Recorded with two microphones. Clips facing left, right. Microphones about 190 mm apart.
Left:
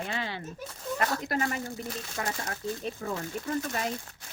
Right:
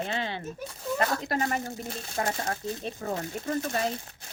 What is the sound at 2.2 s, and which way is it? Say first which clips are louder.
Speech: right 4 dB; 45° right (ahead or behind).